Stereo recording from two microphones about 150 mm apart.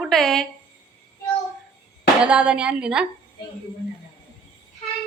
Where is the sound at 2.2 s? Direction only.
5° right (ahead or behind).